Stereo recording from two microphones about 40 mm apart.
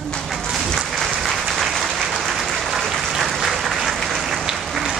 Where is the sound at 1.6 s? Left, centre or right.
Centre.